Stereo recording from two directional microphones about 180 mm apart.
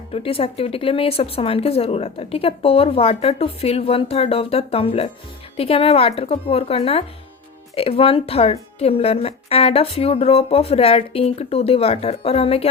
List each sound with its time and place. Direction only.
0.1 s speech: 30° left (ahead or behind)